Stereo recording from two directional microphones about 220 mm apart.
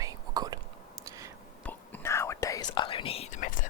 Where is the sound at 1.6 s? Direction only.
10° left (ahead or behind).